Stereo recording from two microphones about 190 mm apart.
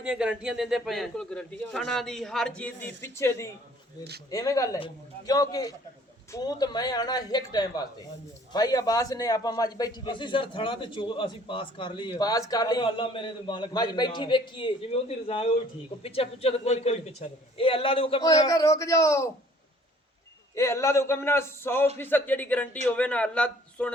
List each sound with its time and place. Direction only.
0.0 s a man's voice: 5° right (ahead or behind); by 19.3 s 15° left (ahead or behind)
20.6 s speech: 15° left (ahead or behind)